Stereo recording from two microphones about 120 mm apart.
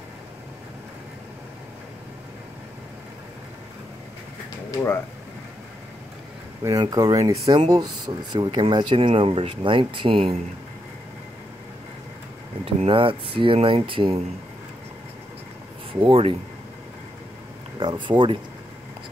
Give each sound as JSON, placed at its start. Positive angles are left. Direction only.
{"t": 4.6, "sound": "speech", "side_deg": 20}
{"t": 6.6, "sound": "speech", "side_deg": -30}
{"t": 12.6, "sound": "speech", "side_deg": -50}
{"t": 15.9, "sound": "speech", "side_deg": -50}
{"t": 17.7, "sound": "speech", "side_deg": -40}